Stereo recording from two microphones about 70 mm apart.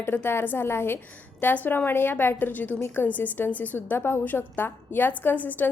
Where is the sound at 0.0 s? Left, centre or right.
Left.